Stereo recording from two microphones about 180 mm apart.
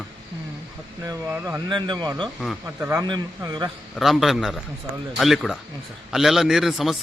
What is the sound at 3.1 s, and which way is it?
Speech, 25° right (ahead or behind).